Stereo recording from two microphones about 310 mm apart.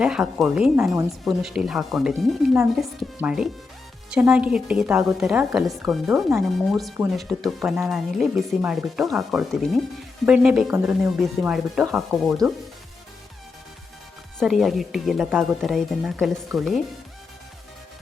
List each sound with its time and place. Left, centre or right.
0.0 s a woman's voice: centre
14.3 s a woman's voice: centre